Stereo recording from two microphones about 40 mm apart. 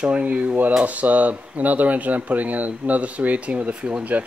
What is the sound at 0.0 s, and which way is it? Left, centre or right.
Speech, right.